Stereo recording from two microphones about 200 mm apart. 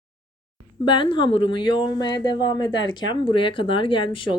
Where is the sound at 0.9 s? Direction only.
25° left (ahead or behind).